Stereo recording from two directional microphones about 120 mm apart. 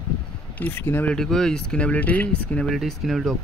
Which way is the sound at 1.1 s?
5° left (ahead or behind).